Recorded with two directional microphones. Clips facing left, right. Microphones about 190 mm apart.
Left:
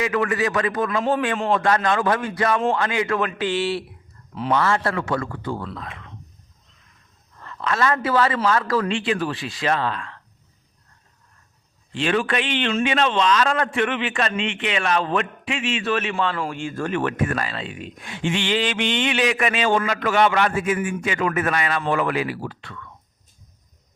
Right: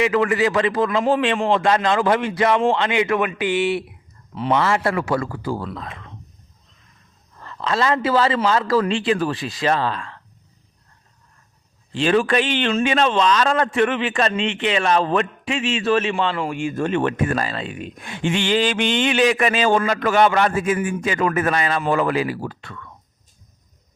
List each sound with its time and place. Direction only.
0.0 s a man's voice: 25° right (ahead or behind)
7.4 s speech: 30° right (ahead or behind)
11.9 s speech: 35° right (ahead or behind)